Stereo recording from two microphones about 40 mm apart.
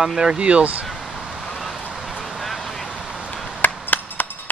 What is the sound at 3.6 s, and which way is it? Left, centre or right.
Chop, left.